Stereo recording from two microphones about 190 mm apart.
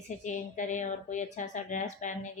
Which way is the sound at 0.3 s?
40° left (ahead or behind).